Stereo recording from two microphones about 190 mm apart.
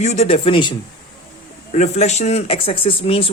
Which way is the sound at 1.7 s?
35° left (ahead or behind).